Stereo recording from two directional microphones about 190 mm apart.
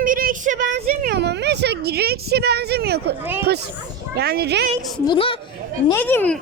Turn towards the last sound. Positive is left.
turn(degrees=10)  # may be behind; listen again after turning